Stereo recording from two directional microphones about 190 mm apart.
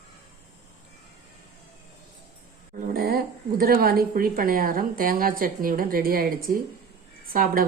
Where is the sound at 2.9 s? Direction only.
55° right (ahead or behind).